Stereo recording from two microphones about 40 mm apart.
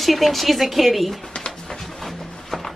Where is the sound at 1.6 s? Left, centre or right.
Centre.